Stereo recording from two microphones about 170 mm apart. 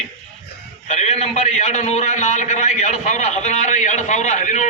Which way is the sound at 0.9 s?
45° left (ahead or behind).